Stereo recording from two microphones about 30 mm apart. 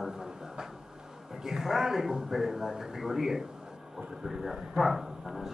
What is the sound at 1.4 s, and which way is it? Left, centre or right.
Speech, centre.